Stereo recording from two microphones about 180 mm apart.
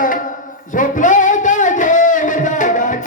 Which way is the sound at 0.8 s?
45° left (ahead or behind).